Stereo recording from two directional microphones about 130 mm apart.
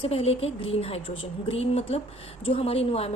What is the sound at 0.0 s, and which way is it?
A woman's voice, 50° left (ahead or behind).